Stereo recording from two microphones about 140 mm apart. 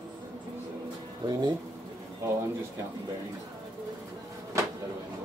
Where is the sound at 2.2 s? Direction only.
20° right (ahead or behind).